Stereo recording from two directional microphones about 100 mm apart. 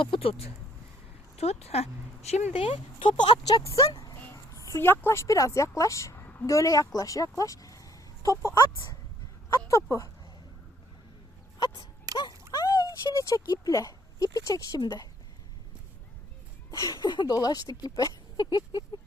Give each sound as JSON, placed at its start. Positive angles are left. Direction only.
{"t": 0.0, "sound": "speech", "side_deg": 65}
{"t": 1.4, "sound": "speech", "side_deg": 90}
{"t": 3.0, "sound": "speech", "side_deg": 60}
{"t": 3.9, "sound": "a sound", "side_deg": 40}
{"t": 4.3, "sound": "a woman's voice", "side_deg": 30}
{"t": 12.1, "sound": "a sound", "side_deg": 45}
{"t": 13.5, "sound": "speech", "side_deg": 35}
{"t": 16.7, "sound": "speech", "side_deg": 35}